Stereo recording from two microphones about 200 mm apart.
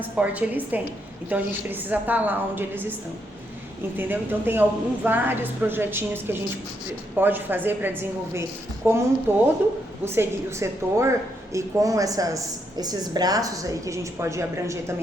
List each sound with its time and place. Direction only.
0.2 s a woman's voice: 10° right (ahead or behind)
3.9 s a woman's voice: 10° right (ahead or behind)